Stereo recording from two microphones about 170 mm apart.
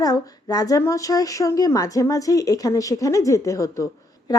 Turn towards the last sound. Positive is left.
turn(degrees=20)  # may be behind; listen again after turning